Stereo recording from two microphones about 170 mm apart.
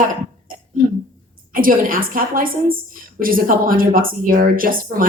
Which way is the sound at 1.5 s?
55° right (ahead or behind).